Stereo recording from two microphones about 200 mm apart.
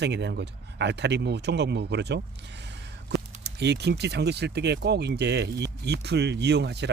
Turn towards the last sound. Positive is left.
turn(degrees=-55)  # may be behind; listen again after turning